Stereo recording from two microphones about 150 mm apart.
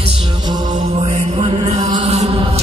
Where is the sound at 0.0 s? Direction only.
40° right (ahead or behind).